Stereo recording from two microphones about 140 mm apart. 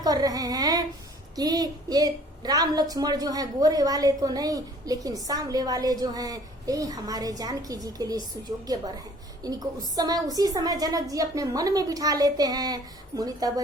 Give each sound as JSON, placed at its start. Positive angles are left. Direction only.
{"t": 0.0, "sound": "a woman's voice", "side_deg": -25}